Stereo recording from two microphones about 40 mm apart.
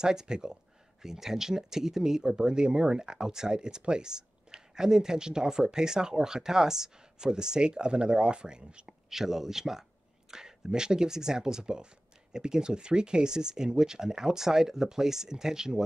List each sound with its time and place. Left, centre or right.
0.0 s speech: centre
9.1 s speech: centre